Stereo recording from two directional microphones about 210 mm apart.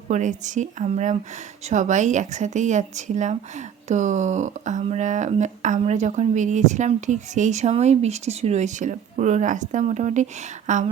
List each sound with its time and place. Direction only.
0.1 s a woman's voice: 35° right (ahead or behind)